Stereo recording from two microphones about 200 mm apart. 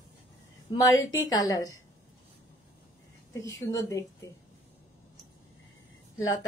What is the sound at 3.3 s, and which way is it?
Speech, 15° left (ahead or behind).